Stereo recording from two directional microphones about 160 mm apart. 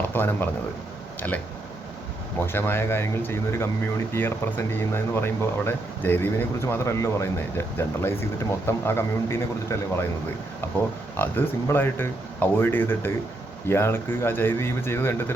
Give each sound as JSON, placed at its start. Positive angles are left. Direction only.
{"t": 0.1, "sound": "speech", "side_deg": 15}
{"t": 2.4, "sound": "speech", "side_deg": 15}
{"t": 11.2, "sound": "speech", "side_deg": 15}